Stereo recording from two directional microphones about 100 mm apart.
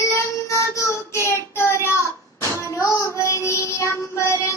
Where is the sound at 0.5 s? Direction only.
30° left (ahead or behind).